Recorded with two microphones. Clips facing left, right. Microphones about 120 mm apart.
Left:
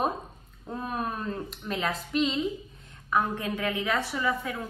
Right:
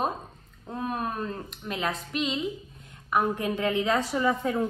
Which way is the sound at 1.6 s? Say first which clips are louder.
Right 1 dB; centre (ahead or behind).